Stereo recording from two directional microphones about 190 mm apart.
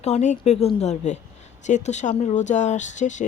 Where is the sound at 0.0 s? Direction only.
35° left (ahead or behind).